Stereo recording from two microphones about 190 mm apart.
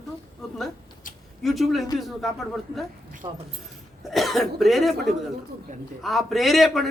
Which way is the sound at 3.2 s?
25° right (ahead or behind).